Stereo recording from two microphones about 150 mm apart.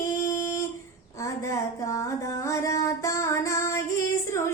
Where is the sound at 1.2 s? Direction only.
20° left (ahead or behind).